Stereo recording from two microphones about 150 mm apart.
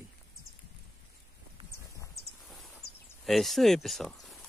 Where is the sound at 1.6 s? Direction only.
35° right (ahead or behind).